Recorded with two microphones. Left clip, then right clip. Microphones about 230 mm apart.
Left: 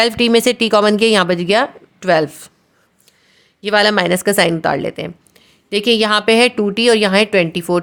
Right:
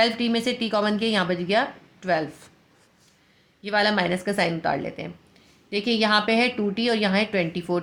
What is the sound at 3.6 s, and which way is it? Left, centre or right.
Speech, left.